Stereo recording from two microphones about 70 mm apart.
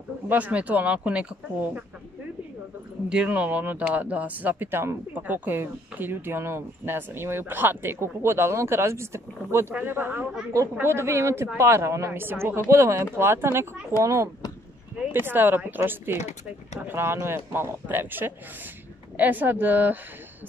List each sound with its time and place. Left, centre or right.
0.3 s speech: centre
3.1 s speech: centre; by 14.3 s right
15.0 s speech: right